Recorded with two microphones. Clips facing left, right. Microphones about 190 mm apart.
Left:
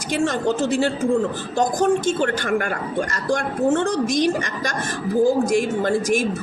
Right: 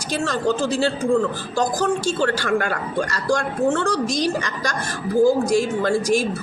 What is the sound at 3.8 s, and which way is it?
Speech, 35° right (ahead or behind).